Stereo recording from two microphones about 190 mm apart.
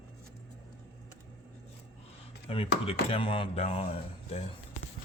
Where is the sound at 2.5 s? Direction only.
30° left (ahead or behind).